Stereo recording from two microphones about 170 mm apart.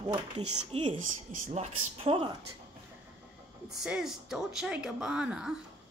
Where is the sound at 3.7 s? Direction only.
5° right (ahead or behind).